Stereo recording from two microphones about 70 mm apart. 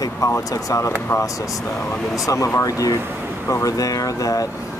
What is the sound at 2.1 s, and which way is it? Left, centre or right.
Speech, left.